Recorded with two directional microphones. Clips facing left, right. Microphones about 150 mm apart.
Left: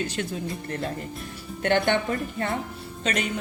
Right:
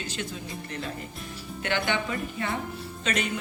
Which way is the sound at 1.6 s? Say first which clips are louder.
Left 6 dB; 50° left (ahead or behind).